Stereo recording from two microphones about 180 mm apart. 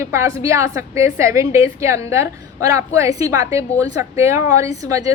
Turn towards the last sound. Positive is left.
turn(degrees=-20)  # may be behind; listen again after turning